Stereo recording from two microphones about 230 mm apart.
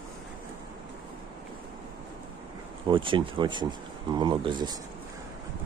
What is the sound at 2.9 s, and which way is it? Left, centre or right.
Speech, right.